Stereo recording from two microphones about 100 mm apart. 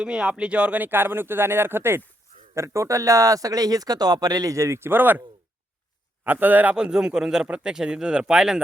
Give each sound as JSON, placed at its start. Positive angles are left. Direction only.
{"t": 0.0, "sound": "speech", "side_deg": -10}
{"t": 6.2, "sound": "a man's voice", "side_deg": -20}